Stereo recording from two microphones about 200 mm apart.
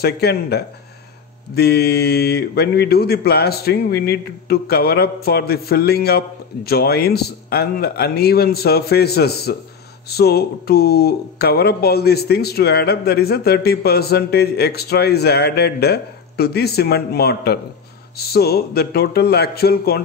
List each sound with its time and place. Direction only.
0.0 s speech: 55° left (ahead or behind)